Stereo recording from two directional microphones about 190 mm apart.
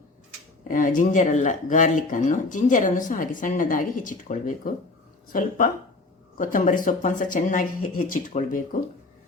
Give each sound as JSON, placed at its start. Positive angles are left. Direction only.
{"t": 0.7, "sound": "speech", "side_deg": 45}